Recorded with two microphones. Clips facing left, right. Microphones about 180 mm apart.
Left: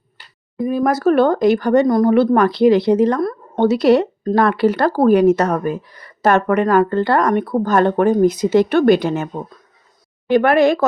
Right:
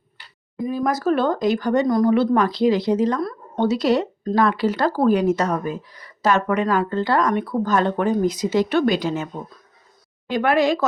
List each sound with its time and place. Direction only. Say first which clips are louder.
0.6 s speech: left 6 dB; 60° left (ahead or behind)